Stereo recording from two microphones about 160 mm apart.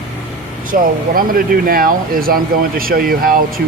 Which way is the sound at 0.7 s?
65° right (ahead or behind).